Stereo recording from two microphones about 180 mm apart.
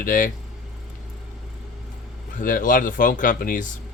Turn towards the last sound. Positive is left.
turn(degrees=50)  # may be behind; listen again after turning